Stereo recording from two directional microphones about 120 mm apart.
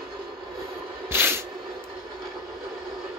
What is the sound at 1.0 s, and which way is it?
Spray, 20° right (ahead or behind).